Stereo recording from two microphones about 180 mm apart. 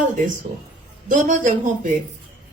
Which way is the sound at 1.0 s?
45° right (ahead or behind).